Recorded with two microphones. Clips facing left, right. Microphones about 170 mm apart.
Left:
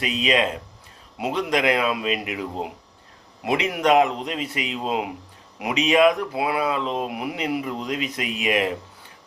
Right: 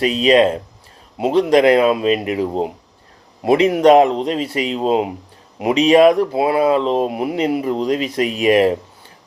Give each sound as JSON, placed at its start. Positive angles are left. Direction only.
{"t": 0.0, "sound": "speech", "side_deg": -35}